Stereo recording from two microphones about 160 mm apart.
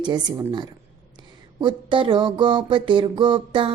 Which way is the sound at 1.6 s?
30° right (ahead or behind).